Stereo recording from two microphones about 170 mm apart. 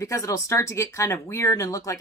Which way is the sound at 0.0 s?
20° left (ahead or behind).